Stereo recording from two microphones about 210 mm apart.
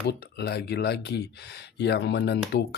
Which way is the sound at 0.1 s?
50° left (ahead or behind).